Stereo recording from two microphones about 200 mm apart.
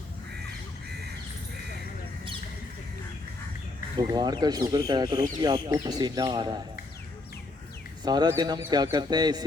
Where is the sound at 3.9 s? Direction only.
20° right (ahead or behind).